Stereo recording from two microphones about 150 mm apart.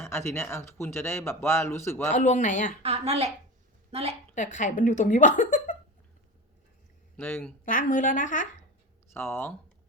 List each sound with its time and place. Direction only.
0.0 s a man's voice: 20° left (ahead or behind)
2.0 s a woman's voice: 50° left (ahead or behind)
2.8 s a woman's voice: 45° right (ahead or behind)
4.4 s a woman's voice: 55° left (ahead or behind)
7.2 s a man's voice: 15° left (ahead or behind)
7.6 s a woman's voice: 60° left (ahead or behind)
9.1 s a man's voice: 15° left (ahead or behind)